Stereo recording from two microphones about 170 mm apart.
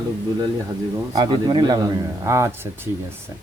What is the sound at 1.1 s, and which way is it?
A man's voice, 25° right (ahead or behind).